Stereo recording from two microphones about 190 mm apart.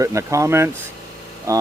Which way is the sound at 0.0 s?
15° right (ahead or behind).